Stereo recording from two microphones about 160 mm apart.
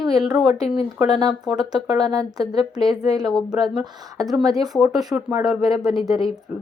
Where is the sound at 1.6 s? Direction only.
25° right (ahead or behind).